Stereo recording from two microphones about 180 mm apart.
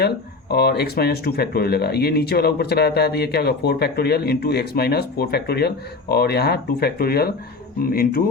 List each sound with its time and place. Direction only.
0.5 s speech: 60° left (ahead or behind)